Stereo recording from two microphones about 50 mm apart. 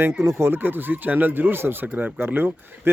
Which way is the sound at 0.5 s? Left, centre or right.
Right.